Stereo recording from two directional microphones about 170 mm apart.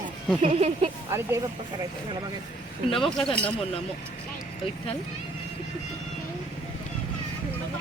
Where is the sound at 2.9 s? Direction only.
30° left (ahead or behind).